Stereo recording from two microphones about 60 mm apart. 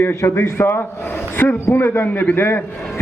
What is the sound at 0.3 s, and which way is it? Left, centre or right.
Speech, left.